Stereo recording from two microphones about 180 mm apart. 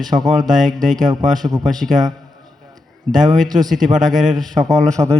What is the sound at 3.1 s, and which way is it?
Speech, centre (ahead or behind).